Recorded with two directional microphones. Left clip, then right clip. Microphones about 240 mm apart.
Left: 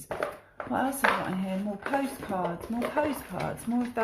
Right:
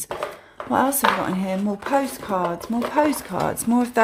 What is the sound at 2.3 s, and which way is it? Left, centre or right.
A woman's voice, right.